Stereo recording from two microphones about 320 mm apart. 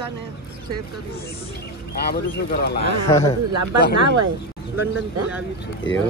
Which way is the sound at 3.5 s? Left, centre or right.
Right.